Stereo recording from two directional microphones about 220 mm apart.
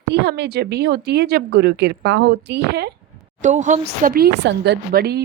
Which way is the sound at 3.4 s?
35° right (ahead or behind).